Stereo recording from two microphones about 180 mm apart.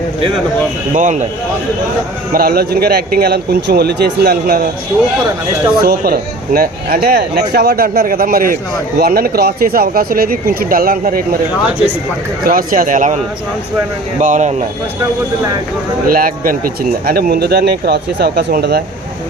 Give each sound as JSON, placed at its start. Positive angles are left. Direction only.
{"t": 0.9, "sound": "speech", "side_deg": -45}
{"t": 2.3, "sound": "speech", "side_deg": -55}
{"t": 5.8, "sound": "speech", "side_deg": -55}
{"t": 12.5, "sound": "speech", "side_deg": -50}
{"t": 16.0, "sound": "speech", "side_deg": -50}